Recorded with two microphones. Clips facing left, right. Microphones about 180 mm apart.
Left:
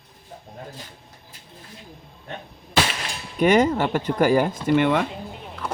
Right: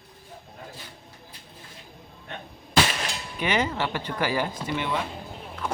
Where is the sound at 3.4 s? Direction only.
45° left (ahead or behind).